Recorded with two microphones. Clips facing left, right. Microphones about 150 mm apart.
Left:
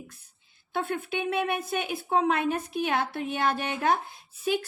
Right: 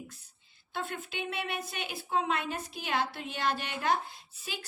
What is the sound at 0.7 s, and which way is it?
A woman's voice, 55° left (ahead or behind).